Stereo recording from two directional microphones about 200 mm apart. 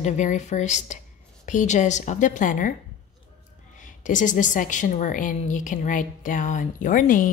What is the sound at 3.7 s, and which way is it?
A woman's voice, 40° left (ahead or behind).